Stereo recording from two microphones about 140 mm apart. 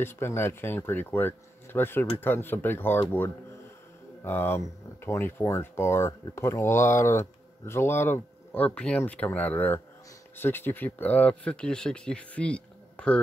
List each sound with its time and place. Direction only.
0.0 s speech: 15° left (ahead or behind)